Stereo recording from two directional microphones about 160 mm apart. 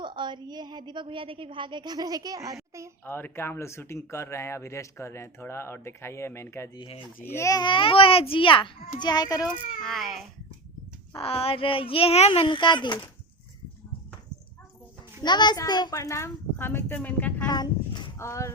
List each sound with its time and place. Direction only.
0.0 s a woman's voice: 30° right (ahead or behind)
3.0 s speech: 15° left (ahead or behind)
6.7 s a child's voice: 35° left (ahead or behind)
7.2 s a child's voice: 15° left (ahead or behind)
9.8 s speech: centre (ahead or behind)
11.1 s a child's voice: 35° left (ahead or behind)
15.2 s a child's voice: 25° left (ahead or behind); by 17.4 s 10° left (ahead or behind)
17.4 s speech: 25° left (ahead or behind)